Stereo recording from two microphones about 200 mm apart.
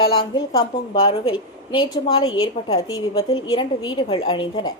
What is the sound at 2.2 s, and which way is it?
Speech, 90° left.